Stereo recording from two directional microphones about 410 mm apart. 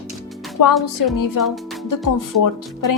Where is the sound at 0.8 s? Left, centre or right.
Left.